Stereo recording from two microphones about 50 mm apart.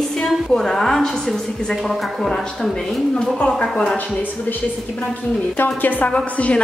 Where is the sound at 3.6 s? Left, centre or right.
Centre.